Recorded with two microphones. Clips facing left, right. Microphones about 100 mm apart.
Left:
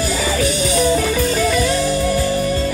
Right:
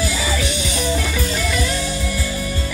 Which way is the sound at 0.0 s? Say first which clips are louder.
Left 4 dB; 40° left (ahead or behind).